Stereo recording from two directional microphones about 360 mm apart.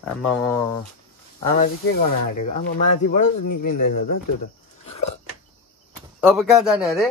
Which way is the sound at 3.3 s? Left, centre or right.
Left.